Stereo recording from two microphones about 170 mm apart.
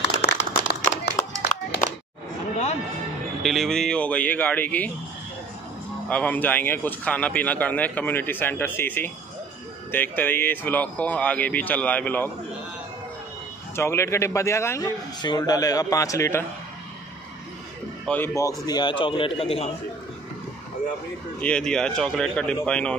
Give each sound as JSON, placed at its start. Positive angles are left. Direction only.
{"t": 0.2, "sound": "a sound", "side_deg": 80}
{"t": 1.2, "sound": "music", "side_deg": 20}
{"t": 1.8, "sound": "a sound", "side_deg": 45}
{"t": 3.4, "sound": "speech", "side_deg": 0}
{"t": 6.0, "sound": "speech", "side_deg": 10}
{"t": 13.7, "sound": "a man's voice", "side_deg": 15}
{"t": 18.0, "sound": "speech", "side_deg": 10}
{"t": 18.7, "sound": "a man's voice", "side_deg": 25}
{"t": 21.4, "sound": "speech", "side_deg": 5}